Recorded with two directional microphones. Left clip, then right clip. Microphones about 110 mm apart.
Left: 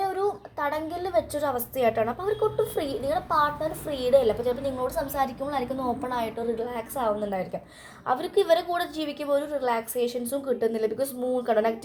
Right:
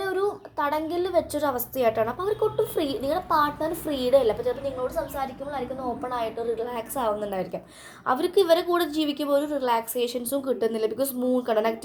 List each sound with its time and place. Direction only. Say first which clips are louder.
0.0 s a woman's voice: even; 5° right (ahead or behind)
6.0 s a woman's voice: even; 10° left (ahead or behind)
6.6 s a woman's voice: right 1 dB; 15° right (ahead or behind)